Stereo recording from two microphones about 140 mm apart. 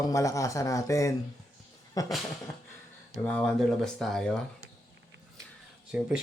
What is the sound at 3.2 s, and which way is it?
Speech, 10° left (ahead or behind).